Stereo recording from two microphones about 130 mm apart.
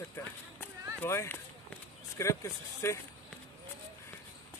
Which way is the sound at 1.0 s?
20° left (ahead or behind).